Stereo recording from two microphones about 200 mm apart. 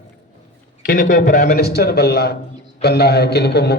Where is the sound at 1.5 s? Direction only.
50° left (ahead or behind).